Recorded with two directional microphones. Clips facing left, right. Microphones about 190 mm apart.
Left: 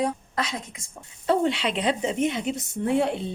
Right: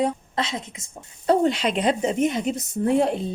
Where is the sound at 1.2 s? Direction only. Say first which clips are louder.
Right 3 dB; 40° right (ahead or behind).